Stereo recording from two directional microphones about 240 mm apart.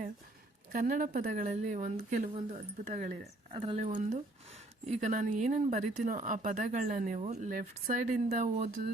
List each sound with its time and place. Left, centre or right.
0.7 s speech: right